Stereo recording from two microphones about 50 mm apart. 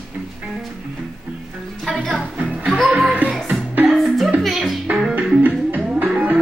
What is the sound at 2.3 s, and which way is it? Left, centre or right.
Music, right.